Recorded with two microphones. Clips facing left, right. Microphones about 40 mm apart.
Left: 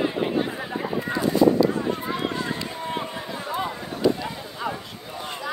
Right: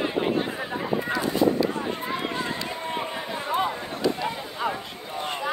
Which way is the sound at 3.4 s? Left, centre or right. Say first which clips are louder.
Right 3 dB; right.